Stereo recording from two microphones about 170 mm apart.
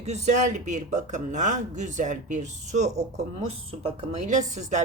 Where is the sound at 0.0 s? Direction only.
45° right (ahead or behind).